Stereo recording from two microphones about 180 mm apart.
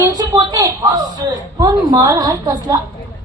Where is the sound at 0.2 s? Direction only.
20° right (ahead or behind).